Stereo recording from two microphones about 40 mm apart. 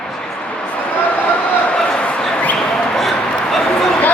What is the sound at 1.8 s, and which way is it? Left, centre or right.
Bow-wow, left.